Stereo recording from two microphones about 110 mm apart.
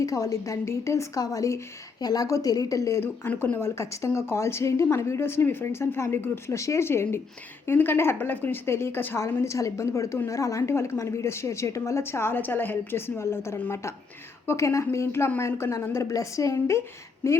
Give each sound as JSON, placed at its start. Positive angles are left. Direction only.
{"t": 0.0, "sound": "speech", "side_deg": 30}